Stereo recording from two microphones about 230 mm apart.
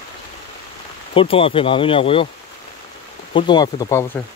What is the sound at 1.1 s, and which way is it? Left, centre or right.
Speech, left.